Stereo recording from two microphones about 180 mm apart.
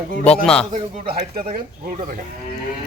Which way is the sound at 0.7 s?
45° right (ahead or behind).